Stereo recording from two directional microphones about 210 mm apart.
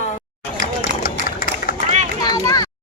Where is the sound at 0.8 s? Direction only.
45° left (ahead or behind).